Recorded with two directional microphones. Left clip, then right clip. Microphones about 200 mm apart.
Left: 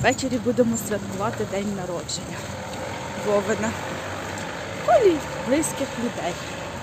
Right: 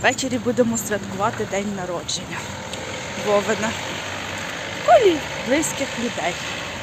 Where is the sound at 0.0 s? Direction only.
Centre (ahead or behind).